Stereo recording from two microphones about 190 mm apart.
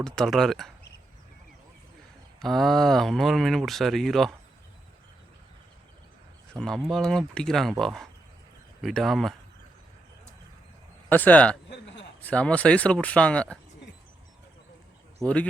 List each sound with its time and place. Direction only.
0.0 s speech: centre (ahead or behind)
2.4 s speech: centre (ahead or behind)
6.5 s speech: centre (ahead or behind)
11.1 s speech: 10° left (ahead or behind)
11.7 s a sound: 70° left (ahead or behind)
12.2 s speech: 5° left (ahead or behind)
15.2 s speech: 20° right (ahead or behind)